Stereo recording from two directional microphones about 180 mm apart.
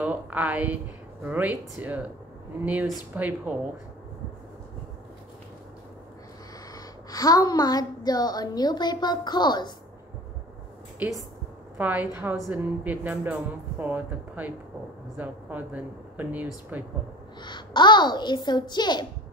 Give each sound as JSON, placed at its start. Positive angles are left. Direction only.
{"t": 0.0, "sound": "speech", "side_deg": -10}
{"t": 6.7, "sound": "a woman's voice", "side_deg": 20}
{"t": 11.0, "sound": "speech", "side_deg": -10}
{"t": 17.4, "sound": "a woman's voice", "side_deg": 25}